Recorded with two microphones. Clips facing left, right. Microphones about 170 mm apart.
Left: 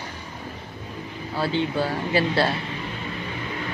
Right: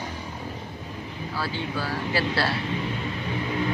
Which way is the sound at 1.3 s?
25° left (ahead or behind).